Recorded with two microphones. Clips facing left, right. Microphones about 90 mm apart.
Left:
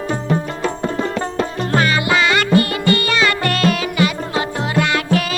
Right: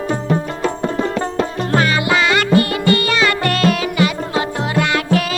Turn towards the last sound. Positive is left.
turn(degrees=-10)  # may be behind; listen again after turning